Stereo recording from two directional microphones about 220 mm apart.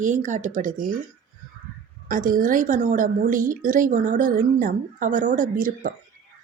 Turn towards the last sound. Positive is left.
turn(degrees=-40)  # may be behind; listen again after turning